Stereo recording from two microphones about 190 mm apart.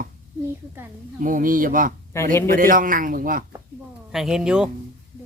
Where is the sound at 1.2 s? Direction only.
45° right (ahead or behind).